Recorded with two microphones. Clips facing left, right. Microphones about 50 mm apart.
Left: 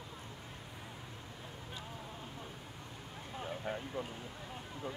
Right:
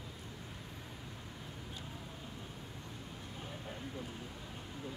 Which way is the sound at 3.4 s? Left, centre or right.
Left.